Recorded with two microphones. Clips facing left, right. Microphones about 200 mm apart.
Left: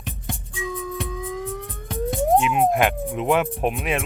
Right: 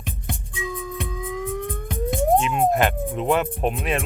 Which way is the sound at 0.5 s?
15° right (ahead or behind).